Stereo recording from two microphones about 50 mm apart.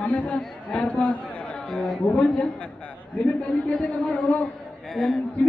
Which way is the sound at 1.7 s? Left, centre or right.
Centre.